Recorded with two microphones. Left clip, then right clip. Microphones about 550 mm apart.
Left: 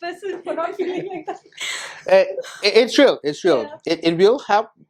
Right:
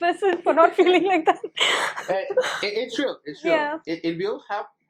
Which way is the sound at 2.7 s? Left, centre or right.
Left.